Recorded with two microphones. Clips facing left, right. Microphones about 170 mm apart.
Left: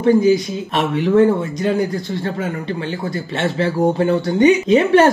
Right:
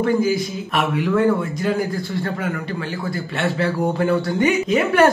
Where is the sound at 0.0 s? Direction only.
20° left (ahead or behind).